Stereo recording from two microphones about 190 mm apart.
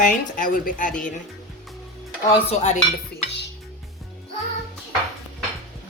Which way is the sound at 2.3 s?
35° left (ahead or behind).